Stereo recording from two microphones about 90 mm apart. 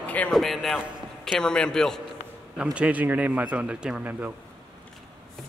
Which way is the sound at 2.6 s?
15° right (ahead or behind).